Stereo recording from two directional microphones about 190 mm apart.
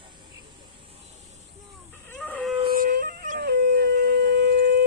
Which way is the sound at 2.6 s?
50° right (ahead or behind).